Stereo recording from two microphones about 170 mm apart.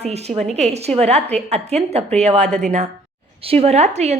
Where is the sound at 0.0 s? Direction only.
40° right (ahead or behind).